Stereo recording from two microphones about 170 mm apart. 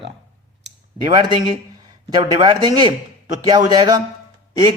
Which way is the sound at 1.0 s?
30° right (ahead or behind).